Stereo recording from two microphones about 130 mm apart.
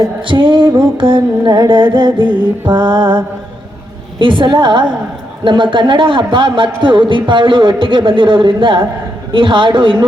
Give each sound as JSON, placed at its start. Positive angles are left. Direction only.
{"t": 0.3, "sound": "music", "side_deg": -40}
{"t": 0.8, "sound": "a man's voice", "side_deg": -40}
{"t": 4.2, "sound": "a man's voice", "side_deg": -40}